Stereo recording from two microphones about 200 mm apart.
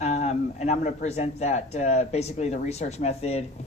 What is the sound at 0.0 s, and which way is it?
A man's voice, 35° left (ahead or behind).